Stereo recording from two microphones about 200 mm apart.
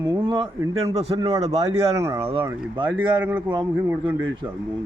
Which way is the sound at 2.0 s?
15° right (ahead or behind).